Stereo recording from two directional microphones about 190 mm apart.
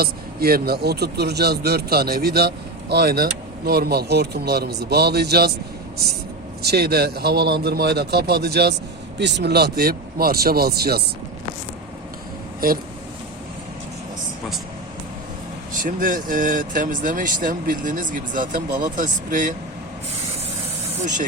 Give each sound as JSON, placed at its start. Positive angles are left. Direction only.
{"t": 0.0, "sound": "a man's voice", "side_deg": -55}
{"t": 6.6, "sound": "a man's voice", "side_deg": -55}
{"t": 12.5, "sound": "speech", "side_deg": -50}
{"t": 15.7, "sound": "speech", "side_deg": -45}